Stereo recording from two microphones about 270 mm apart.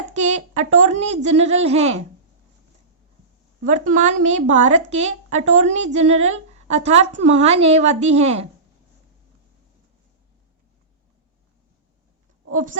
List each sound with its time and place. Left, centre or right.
0.1 s a woman's voice: right
3.6 s a woman's voice: right
12.5 s speech: right